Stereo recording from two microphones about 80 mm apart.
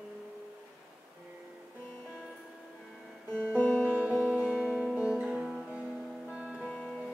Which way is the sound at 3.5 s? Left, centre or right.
Left.